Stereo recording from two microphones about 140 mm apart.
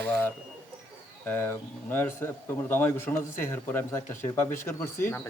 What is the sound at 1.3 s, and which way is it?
A man's voice, 15° left (ahead or behind).